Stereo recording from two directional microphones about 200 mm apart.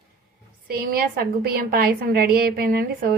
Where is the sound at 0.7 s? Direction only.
50° right (ahead or behind).